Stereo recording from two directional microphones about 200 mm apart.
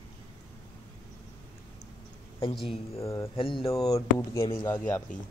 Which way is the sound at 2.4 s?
25° left (ahead or behind).